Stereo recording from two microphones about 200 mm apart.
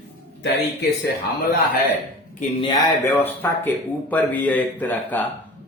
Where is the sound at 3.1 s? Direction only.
10° left (ahead or behind).